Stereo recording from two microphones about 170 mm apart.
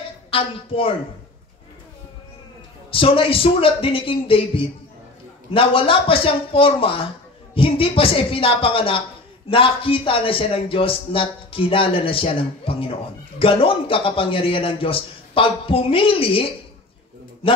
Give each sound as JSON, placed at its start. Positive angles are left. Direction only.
{"t": 0.3, "sound": "a man's voice", "side_deg": 35}
{"t": 2.9, "sound": "a man's voice", "side_deg": 30}